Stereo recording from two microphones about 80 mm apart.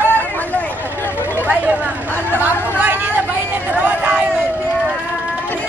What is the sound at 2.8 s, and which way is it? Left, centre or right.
Vehicle, right.